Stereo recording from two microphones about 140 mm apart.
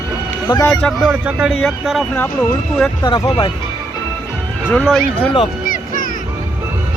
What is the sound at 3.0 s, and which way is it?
Speech, 30° left (ahead or behind).